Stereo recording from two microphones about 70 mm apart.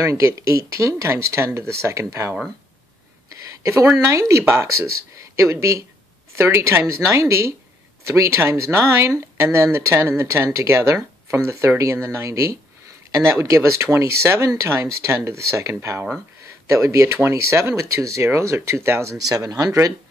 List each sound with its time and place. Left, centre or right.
0.0 s speech: right
3.9 s speech: right
19.1 s speech: right